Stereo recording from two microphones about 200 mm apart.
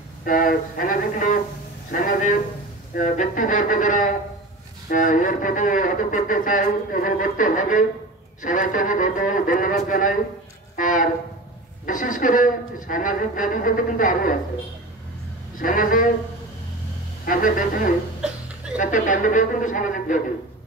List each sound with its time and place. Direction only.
0.2 s speech: 45° left (ahead or behind)
15.5 s speech: 45° left (ahead or behind)
17.2 s speech: 45° left (ahead or behind)
18.2 s a sound: 5° right (ahead or behind)
18.8 s speech: 40° left (ahead or behind)